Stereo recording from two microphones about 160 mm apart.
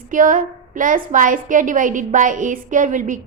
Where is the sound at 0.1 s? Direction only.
55° right (ahead or behind).